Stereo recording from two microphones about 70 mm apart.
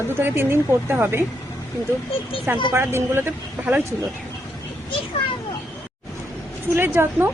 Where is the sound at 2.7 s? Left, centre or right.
Right.